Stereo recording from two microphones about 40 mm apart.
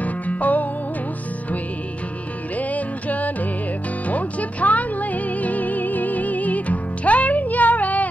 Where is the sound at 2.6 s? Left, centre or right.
Left.